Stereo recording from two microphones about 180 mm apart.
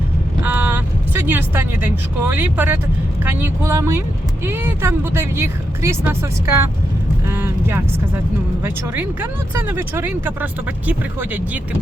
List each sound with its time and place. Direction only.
0.4 s speech: 10° right (ahead or behind)
9.6 s speech: 10° right (ahead or behind)